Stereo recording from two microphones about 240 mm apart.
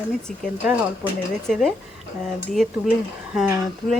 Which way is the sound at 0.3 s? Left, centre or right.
Centre.